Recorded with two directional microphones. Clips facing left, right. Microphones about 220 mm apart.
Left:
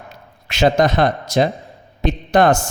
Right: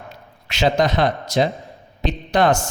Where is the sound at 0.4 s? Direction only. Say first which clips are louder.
Left 4 dB; 50° left (ahead or behind).